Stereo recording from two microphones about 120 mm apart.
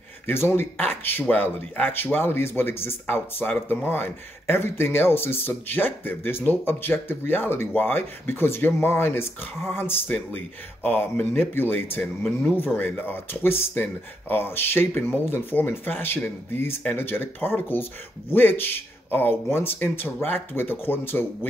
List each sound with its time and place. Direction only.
0.3 s speech: 20° left (ahead or behind)